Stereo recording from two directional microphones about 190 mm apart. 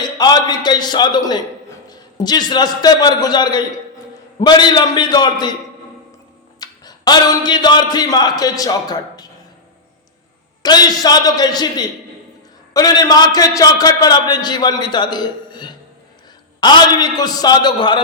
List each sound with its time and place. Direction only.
0.0 s a man's voice: 20° left (ahead or behind)
6.6 s speech: 20° left (ahead or behind)
10.6 s a man's voice: 20° left (ahead or behind)